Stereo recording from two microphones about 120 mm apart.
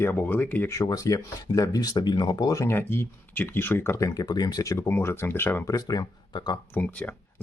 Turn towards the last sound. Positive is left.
turn(degrees=15)  # may be behind; listen again after turning